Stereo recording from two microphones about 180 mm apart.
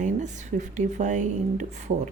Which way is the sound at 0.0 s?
45° right (ahead or behind).